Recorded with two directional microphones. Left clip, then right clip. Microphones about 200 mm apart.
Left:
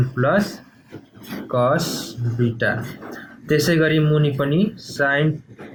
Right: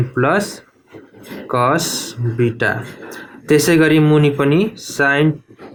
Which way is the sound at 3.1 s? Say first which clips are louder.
Right 6 dB; 50° right (ahead or behind).